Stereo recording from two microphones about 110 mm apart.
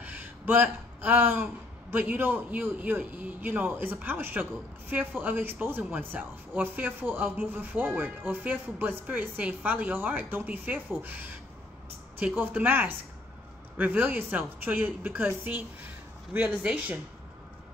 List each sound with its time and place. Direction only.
0.0 s speech: 20° right (ahead or behind)
12.4 s a woman's voice: 20° right (ahead or behind)